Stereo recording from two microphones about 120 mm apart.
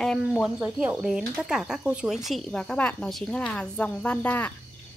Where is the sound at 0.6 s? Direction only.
10° right (ahead or behind).